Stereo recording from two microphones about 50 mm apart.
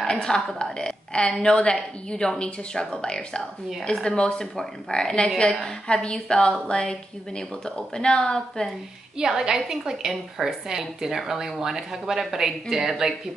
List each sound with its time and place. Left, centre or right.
0.0 s a woman's voice: centre
9.2 s a woman's voice: centre